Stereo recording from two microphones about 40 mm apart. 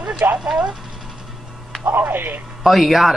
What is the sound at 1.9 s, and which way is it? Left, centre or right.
Speech, right.